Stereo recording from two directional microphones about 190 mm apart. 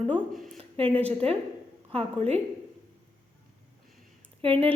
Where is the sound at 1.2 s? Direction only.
30° right (ahead or behind).